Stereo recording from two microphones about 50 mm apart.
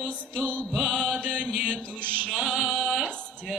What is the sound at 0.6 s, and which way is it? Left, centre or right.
Mantra, centre.